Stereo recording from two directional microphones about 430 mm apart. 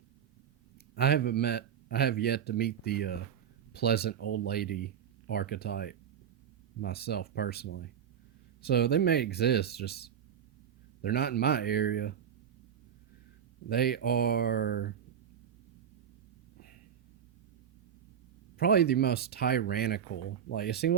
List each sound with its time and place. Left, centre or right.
0.9 s speech: left
13.7 s speech: left
18.5 s speech: left